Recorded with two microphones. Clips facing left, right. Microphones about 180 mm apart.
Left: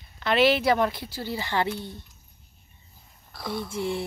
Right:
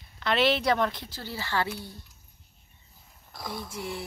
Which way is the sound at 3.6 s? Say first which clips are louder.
Left 7 dB; 25° left (ahead or behind).